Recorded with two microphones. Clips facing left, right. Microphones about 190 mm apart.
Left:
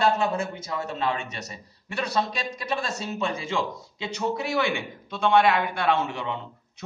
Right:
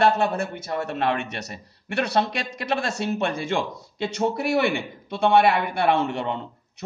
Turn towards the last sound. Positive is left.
turn(degrees=-55)  # may be behind; listen again after turning